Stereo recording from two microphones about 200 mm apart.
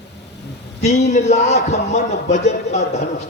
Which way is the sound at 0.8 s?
35° left (ahead or behind).